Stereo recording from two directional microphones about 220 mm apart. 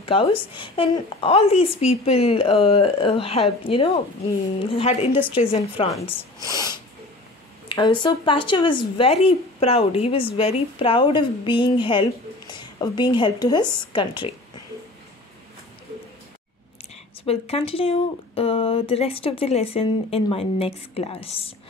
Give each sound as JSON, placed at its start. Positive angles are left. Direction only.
{"t": 0.0, "sound": "a woman's voice", "side_deg": 25}
{"t": 17.2, "sound": "speech", "side_deg": 25}